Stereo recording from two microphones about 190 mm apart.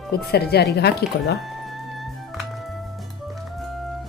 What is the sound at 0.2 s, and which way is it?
A woman's voice, 55° left (ahead or behind).